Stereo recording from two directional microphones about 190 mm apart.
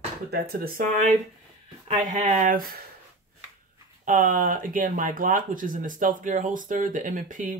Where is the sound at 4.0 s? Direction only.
45° right (ahead or behind).